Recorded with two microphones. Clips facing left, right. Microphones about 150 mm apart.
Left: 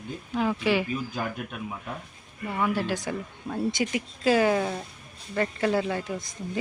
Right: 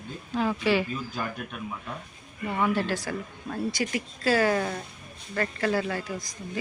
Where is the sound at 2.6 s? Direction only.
10° left (ahead or behind).